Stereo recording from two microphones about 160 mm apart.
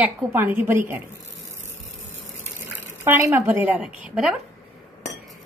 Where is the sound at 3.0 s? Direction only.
15° right (ahead or behind).